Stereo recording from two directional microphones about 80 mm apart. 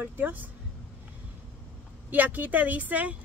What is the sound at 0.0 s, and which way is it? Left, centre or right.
Speech, right.